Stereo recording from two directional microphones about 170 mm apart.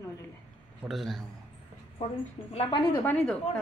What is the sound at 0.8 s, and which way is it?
Speech, centre (ahead or behind).